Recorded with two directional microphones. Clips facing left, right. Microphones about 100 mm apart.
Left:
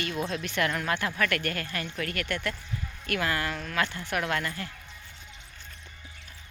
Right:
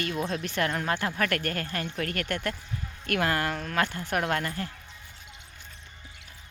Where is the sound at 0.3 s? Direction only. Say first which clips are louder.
Even; 40° right (ahead or behind).